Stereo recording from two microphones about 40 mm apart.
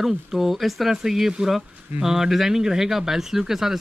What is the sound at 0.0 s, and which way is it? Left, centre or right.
Speech, centre.